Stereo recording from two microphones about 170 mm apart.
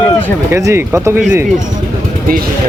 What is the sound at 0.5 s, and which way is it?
Speech, 15° right (ahead or behind).